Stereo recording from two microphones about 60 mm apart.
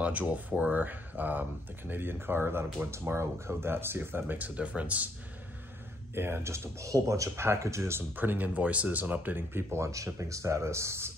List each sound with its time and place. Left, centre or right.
0.0 s speech: right
6.1 s speech: right
8.2 s speech: right